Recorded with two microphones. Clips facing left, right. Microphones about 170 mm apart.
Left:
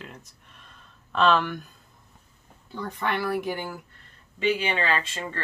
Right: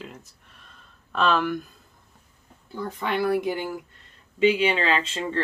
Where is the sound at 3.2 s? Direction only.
20° right (ahead or behind).